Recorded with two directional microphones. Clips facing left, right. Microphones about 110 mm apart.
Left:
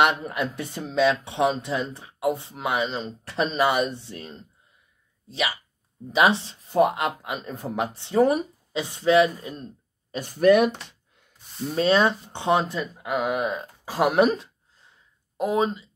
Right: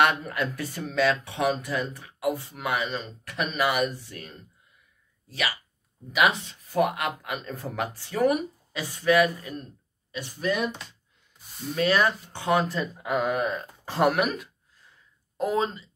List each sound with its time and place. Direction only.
0.0 s speech: 20° left (ahead or behind)
10.1 s speech: 55° left (ahead or behind)
11.7 s speech: 25° left (ahead or behind)
12.7 s speech: centre (ahead or behind)
13.2 s speech: 15° left (ahead or behind)
14.1 s a sound: 30° left (ahead or behind)
15.3 s speech: 15° left (ahead or behind)